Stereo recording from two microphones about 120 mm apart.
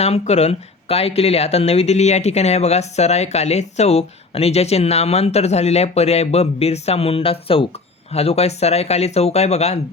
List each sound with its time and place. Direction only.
0.0 s speech: 60° left (ahead or behind)